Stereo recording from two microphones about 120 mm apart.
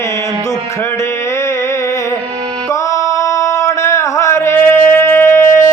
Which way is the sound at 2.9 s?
25° left (ahead or behind).